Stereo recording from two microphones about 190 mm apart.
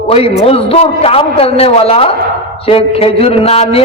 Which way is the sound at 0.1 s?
30° left (ahead or behind).